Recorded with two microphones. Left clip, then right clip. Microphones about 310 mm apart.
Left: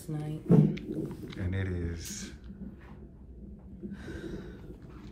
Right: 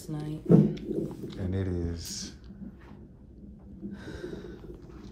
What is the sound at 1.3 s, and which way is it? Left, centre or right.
Speech, centre.